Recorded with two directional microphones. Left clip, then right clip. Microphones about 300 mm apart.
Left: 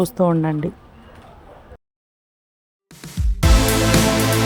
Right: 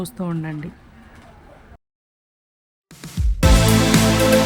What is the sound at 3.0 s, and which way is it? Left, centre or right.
Music, centre.